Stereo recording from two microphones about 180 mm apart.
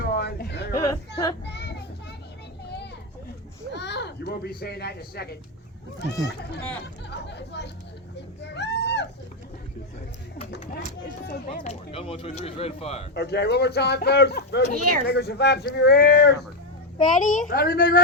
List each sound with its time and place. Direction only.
0.0 s a sound: 65° left (ahead or behind)
0.9 s speech: 20° left (ahead or behind)
1.5 s child singing: 70° left (ahead or behind)
2.6 s children playing: 65° left (ahead or behind)
3.7 s speech: 70° left (ahead or behind)
6.0 s speech: 70° left (ahead or behind)
11.6 s speech: 35° left (ahead or behind)
13.1 s speech: 65° left (ahead or behind)
17.2 s speech: 45° left (ahead or behind)